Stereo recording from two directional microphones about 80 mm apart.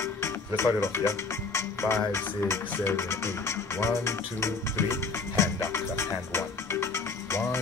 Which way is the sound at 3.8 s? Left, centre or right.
Left.